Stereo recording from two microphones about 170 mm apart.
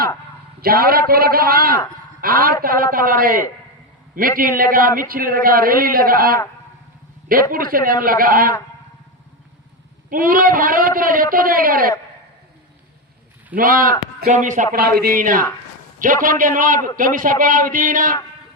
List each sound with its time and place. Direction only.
0.6 s a man's voice: 60° right (ahead or behind)
7.5 s a man's voice: 55° right (ahead or behind)
10.1 s a man's voice: 55° right (ahead or behind)
13.6 s a man's voice: 55° right (ahead or behind)
14.8 s a man's voice: 65° right (ahead or behind)